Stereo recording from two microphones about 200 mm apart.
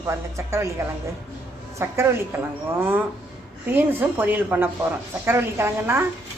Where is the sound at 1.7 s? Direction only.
10° right (ahead or behind).